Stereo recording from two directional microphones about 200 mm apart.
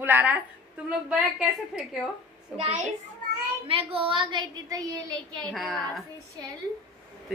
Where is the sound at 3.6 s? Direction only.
30° right (ahead or behind).